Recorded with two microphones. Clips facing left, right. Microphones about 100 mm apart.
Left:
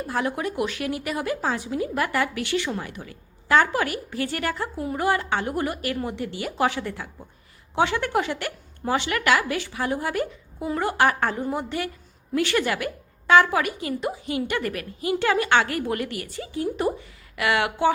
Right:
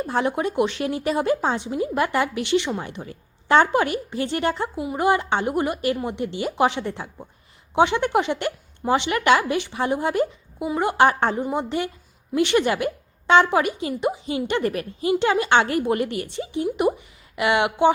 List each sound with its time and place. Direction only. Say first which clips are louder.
0.1 s speech: right 3 dB; 25° right (ahead or behind)